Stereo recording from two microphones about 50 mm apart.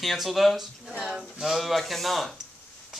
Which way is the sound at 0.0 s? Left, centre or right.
Centre.